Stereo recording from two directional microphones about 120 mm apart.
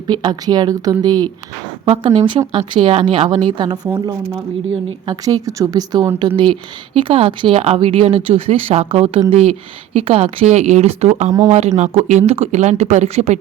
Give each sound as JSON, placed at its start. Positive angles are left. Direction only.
{"t": 0.1, "sound": "speech", "side_deg": -35}
{"t": 1.9, "sound": "speech", "side_deg": -60}
{"t": 2.7, "sound": "speech", "side_deg": -50}
{"t": 5.2, "sound": "speech", "side_deg": -30}
{"t": 11.8, "sound": "speech", "side_deg": -75}